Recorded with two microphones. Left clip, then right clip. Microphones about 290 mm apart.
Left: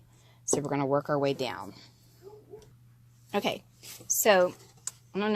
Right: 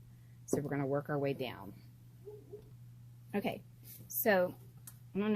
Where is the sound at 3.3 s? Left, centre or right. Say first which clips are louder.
Left 8 dB; left.